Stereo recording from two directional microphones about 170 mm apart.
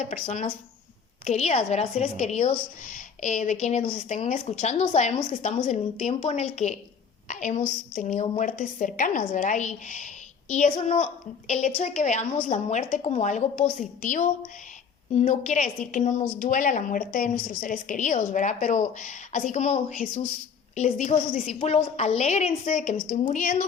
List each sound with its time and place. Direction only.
0.0 s a woman's voice: 40° left (ahead or behind)